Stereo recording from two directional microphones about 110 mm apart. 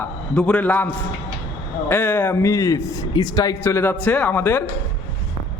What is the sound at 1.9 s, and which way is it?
A man's voice, 20° left (ahead or behind).